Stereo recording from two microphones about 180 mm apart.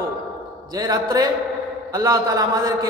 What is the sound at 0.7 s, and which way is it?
A man's voice, 20° right (ahead or behind).